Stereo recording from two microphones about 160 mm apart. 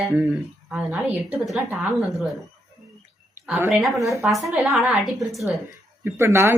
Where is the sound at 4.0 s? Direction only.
20° right (ahead or behind).